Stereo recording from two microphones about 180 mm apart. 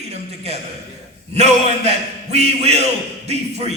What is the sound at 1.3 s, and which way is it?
A man's voice, 35° right (ahead or behind).